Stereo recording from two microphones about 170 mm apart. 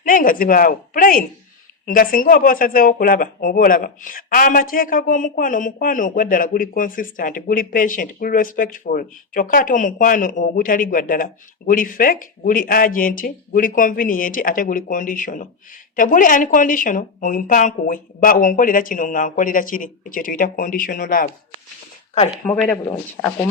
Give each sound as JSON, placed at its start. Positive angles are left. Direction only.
{"t": 0.1, "sound": "a woman's voice", "side_deg": 55}
{"t": 22.4, "sound": "speech", "side_deg": 5}